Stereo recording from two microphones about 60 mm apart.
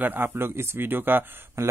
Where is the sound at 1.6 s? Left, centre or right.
Right.